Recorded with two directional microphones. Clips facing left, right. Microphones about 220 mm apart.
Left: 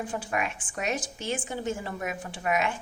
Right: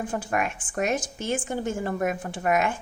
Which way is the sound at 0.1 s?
45° right (ahead or behind).